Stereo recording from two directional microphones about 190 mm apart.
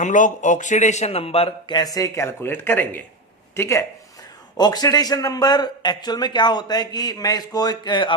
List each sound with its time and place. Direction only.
0.0 s a man's voice: 45° left (ahead or behind); by 8.1 s 25° left (ahead or behind)